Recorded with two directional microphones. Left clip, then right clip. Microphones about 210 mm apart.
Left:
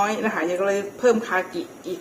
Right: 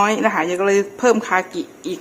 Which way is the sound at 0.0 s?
45° right (ahead or behind).